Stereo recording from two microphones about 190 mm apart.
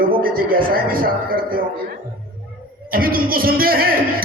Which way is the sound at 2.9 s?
50° right (ahead or behind).